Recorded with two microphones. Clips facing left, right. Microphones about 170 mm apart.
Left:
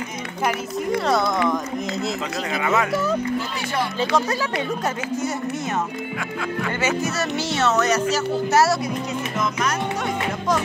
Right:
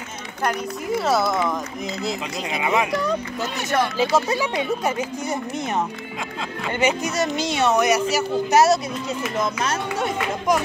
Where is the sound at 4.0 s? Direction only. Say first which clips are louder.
Left 1 dB; 5° right (ahead or behind).